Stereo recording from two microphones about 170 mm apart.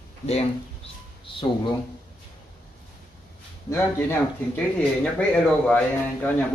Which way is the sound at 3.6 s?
15° left (ahead or behind).